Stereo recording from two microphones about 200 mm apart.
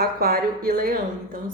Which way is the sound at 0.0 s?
50° right (ahead or behind).